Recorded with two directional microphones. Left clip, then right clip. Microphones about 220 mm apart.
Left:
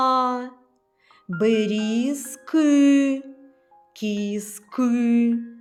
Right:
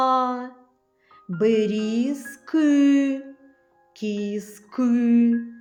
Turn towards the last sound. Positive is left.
turn(degrees=30)  # may be behind; listen again after turning